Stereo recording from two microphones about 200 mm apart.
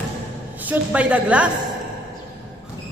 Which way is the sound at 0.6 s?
5° right (ahead or behind).